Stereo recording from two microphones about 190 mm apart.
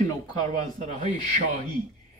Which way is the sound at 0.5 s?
40° right (ahead or behind).